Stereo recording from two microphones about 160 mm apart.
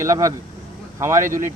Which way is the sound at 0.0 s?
20° right (ahead or behind).